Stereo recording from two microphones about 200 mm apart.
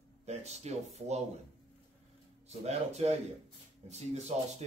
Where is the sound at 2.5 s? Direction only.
30° right (ahead or behind).